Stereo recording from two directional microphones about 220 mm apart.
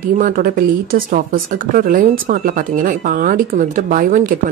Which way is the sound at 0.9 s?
40° right (ahead or behind).